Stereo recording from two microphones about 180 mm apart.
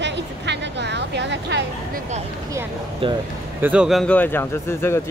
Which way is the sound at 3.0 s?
30° right (ahead or behind).